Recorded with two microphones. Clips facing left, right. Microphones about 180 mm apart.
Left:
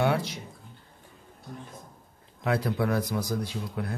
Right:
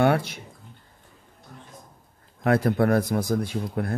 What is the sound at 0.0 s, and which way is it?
Speech, 55° right (ahead or behind).